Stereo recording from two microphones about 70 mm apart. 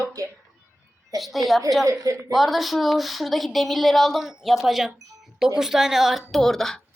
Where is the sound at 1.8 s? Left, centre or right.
Right.